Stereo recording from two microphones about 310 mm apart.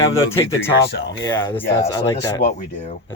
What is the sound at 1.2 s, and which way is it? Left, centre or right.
Speech, centre.